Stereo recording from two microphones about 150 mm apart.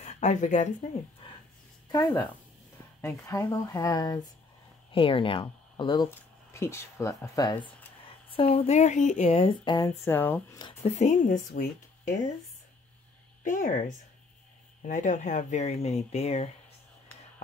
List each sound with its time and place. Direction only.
0.0 s speech: 50° left (ahead or behind)
1.9 s speech: 25° left (ahead or behind)
4.9 s speech: 35° left (ahead or behind)
6.0 s speech: 15° left (ahead or behind)
8.3 s speech: 40° left (ahead or behind); by 9.3 s 55° left (ahead or behind)
9.3 s speech: 40° left (ahead or behind)
9.8 s speech: 15° left (ahead or behind)
10.8 s a woman's voice: 50° left (ahead or behind)
13.4 s speech: 60° left (ahead or behind)
17.1 s a sound: 10° left (ahead or behind)